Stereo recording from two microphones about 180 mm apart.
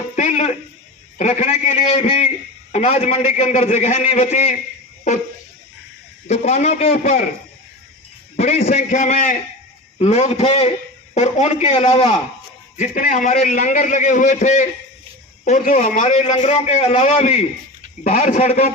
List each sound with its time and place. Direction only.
0.2 s a sound: 40° left (ahead or behind)
1.2 s a man's voice: 40° left (ahead or behind)
6.2 s a man's voice: 40° left (ahead or behind)
8.4 s a man's voice: 35° left (ahead or behind)